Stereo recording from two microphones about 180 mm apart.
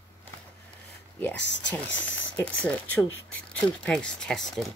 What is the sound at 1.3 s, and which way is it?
Speech, 80° left.